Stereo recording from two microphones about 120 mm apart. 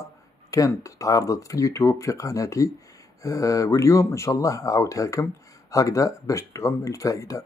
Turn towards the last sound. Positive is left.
turn(degrees=25)  # may be behind; listen again after turning